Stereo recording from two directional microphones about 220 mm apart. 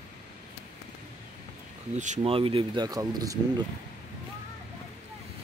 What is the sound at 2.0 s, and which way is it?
Speech, 30° right (ahead or behind).